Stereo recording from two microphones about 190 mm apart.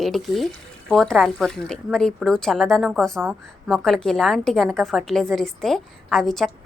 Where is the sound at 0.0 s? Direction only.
Centre (ahead or behind).